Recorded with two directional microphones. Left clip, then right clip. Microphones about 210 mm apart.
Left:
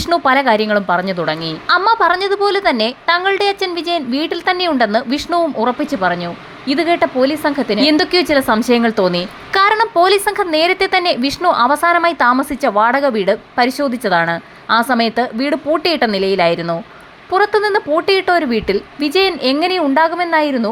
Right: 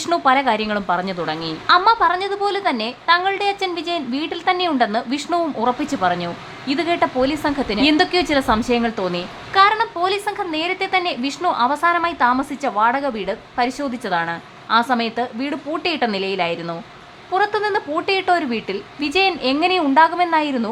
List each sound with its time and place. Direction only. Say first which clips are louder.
0.1 s a woman's voice: left 4 dB; 15° left (ahead or behind)